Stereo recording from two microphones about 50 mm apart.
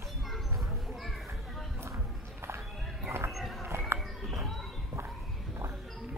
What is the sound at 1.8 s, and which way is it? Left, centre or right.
Walk, right.